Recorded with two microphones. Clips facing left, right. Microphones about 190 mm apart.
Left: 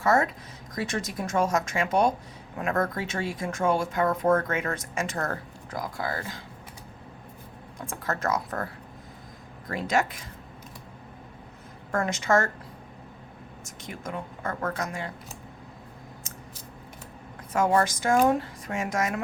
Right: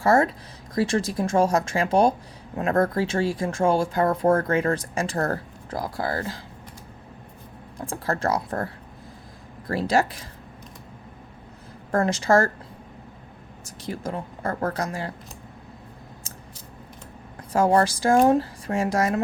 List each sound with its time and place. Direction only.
0.0 s speech: 30° right (ahead or behind)
7.8 s speech: 30° right (ahead or behind)
11.9 s speech: 35° right (ahead or behind)
13.7 s speech: 35° right (ahead or behind)
17.5 s speech: 30° right (ahead or behind)